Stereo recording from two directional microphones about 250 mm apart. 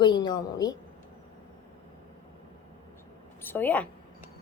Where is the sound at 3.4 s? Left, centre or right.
Centre.